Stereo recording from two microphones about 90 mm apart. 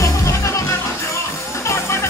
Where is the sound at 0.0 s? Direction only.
35° left (ahead or behind).